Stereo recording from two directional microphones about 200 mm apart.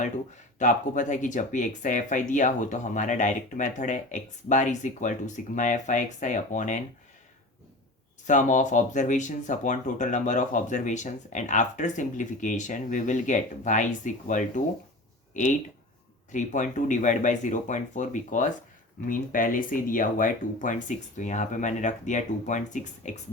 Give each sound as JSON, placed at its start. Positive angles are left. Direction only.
{"t": 0.6, "sound": "speech", "side_deg": 40}
{"t": 8.3, "sound": "speech", "side_deg": 40}